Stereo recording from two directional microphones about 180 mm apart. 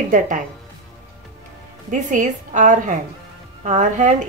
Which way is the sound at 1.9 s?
45° right (ahead or behind).